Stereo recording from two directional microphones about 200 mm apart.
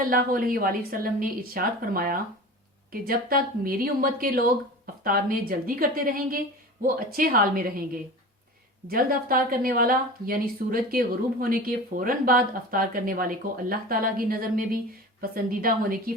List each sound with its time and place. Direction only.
0.1 s a woman's voice: 45° right (ahead or behind)
8.9 s a woman's voice: 45° right (ahead or behind)